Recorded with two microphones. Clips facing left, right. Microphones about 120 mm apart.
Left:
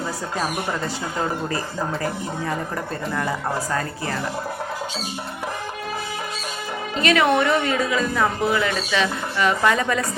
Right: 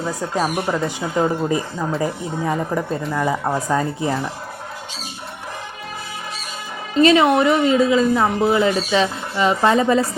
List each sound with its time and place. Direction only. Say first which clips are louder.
0.2 s speech: right 4 dB; 15° right (ahead or behind)
3.2 s speech: right 4 dB; 15° right (ahead or behind)
7.0 s speech: right 5 dB; 25° right (ahead or behind)